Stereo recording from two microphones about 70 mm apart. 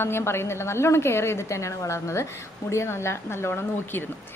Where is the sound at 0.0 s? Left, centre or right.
Left.